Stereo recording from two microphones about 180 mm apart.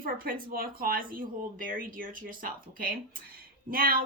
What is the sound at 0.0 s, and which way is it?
A woman's voice, 55° right (ahead or behind).